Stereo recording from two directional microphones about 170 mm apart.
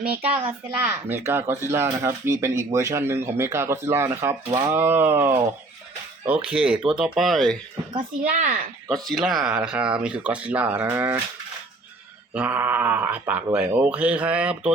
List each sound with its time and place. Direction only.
0.2 s speech: 35° right (ahead or behind)
0.8 s speech: 10° right (ahead or behind)
7.9 s speech: 40° right (ahead or behind)
8.9 s speech: centre (ahead or behind)
12.3 s speech: 10° right (ahead or behind)